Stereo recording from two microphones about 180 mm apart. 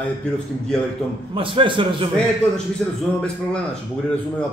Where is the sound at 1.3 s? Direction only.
30° right (ahead or behind).